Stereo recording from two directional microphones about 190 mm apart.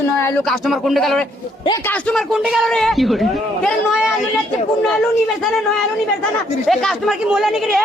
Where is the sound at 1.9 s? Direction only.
5° left (ahead or behind).